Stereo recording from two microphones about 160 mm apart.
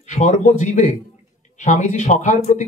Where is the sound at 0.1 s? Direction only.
45° left (ahead or behind).